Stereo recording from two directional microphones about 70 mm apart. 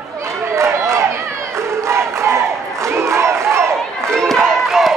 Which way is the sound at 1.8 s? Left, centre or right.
Right.